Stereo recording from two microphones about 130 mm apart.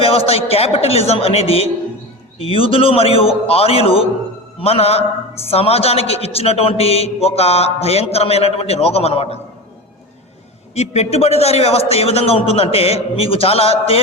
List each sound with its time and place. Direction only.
0.0 s a man's voice: 45° left (ahead or behind)
10.8 s a man's voice: 55° left (ahead or behind)